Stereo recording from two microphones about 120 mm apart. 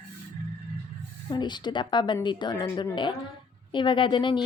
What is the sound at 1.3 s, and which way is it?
Speech, 40° left (ahead or behind).